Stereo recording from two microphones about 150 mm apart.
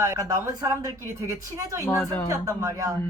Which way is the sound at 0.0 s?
20° right (ahead or behind).